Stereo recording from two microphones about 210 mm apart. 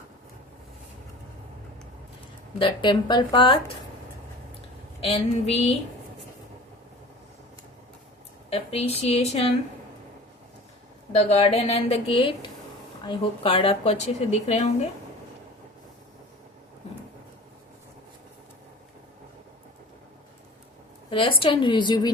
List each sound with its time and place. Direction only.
2.6 s speech: 20° left (ahead or behind)
5.0 s speech: 30° left (ahead or behind)
8.4 s a sound: 30° left (ahead or behind)
9.0 s speech: 30° left (ahead or behind)
11.1 s speech: 30° left (ahead or behind)
21.1 s speech: 25° left (ahead or behind)